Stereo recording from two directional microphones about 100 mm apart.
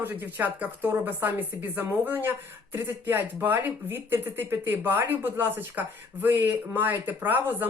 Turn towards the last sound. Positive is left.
turn(degrees=-20)  # may be behind; listen again after turning